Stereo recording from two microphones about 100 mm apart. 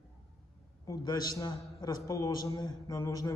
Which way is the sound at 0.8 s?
40° left (ahead or behind).